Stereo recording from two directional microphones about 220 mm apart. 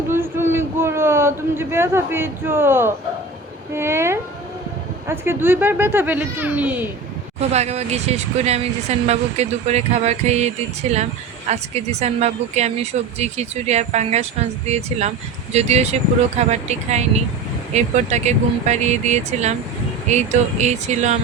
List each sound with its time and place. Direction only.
0.1 s a sound: 10° right (ahead or behind)
3.8 s speech: 10° right (ahead or behind)
7.3 s speech: 30° right (ahead or behind)